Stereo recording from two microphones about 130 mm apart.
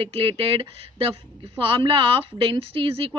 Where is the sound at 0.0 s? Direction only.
45° right (ahead or behind).